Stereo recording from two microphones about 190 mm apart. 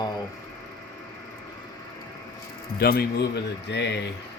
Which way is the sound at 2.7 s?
55° left (ahead or behind).